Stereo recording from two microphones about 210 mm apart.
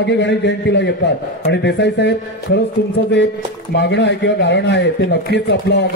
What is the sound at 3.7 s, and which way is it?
A man's voice, 55° left (ahead or behind).